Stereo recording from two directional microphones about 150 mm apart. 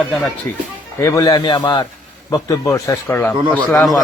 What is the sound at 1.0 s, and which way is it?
A man's voice, 20° left (ahead or behind).